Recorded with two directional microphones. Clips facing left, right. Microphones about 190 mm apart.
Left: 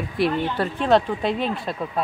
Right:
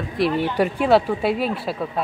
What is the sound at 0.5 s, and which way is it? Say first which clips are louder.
Speech: right 4 dB; 10° right (ahead or behind).